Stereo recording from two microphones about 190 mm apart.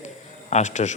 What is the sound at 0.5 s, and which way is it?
Speech, 40° left (ahead or behind).